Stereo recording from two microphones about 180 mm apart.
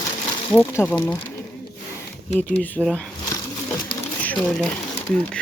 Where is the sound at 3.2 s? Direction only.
15° left (ahead or behind).